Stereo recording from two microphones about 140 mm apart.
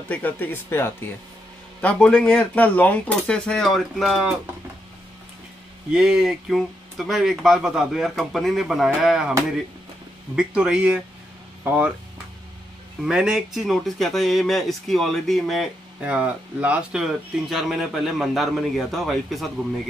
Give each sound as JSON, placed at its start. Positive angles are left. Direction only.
{"t": 0.1, "sound": "speech", "side_deg": 10}
{"t": 5.9, "sound": "speech", "side_deg": -5}
{"t": 10.3, "sound": "speech", "side_deg": -5}
{"t": 13.0, "sound": "speech", "side_deg": -5}